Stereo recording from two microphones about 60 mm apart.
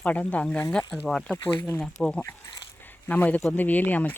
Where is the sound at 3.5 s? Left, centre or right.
Left.